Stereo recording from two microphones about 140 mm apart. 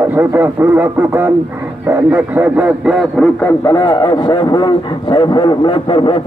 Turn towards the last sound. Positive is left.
turn(degrees=35)  # may be behind; listen again after turning